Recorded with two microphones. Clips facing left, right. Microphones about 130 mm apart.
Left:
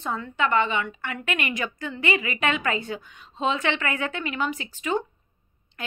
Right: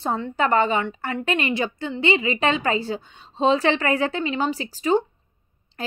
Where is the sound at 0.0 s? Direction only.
35° right (ahead or behind).